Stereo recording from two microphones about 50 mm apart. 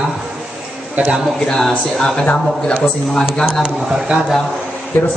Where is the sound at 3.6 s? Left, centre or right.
Centre.